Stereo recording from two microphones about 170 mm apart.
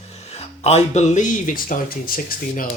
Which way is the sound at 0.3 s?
35° left (ahead or behind).